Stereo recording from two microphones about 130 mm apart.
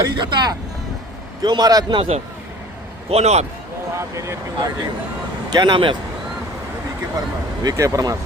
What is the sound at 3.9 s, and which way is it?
Speech, 25° right (ahead or behind).